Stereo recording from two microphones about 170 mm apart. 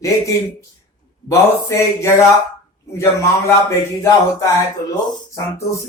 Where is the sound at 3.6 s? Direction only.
20° left (ahead or behind).